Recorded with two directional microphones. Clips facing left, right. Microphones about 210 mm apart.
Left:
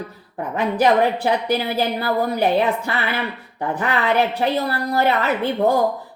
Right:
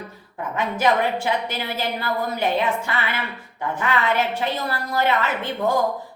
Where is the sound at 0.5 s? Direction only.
35° left (ahead or behind).